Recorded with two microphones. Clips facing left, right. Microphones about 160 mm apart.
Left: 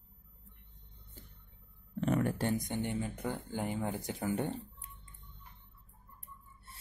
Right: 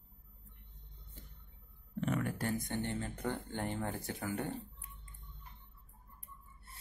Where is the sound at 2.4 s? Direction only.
20° left (ahead or behind).